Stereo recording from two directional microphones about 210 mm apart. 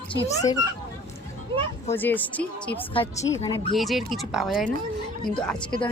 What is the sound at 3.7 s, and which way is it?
A woman's voice, centre (ahead or behind).